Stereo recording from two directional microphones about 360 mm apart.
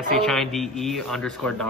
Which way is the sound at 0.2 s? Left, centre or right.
Centre.